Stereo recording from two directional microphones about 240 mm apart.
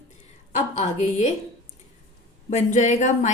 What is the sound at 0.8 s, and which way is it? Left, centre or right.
Speech, left.